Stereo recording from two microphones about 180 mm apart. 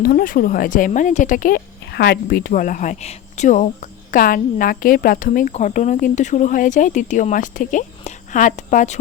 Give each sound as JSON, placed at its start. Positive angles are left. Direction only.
{"t": 0.0, "sound": "speech", "side_deg": 55}